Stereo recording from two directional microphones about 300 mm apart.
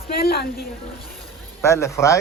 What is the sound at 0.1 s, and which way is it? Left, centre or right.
Speech, left.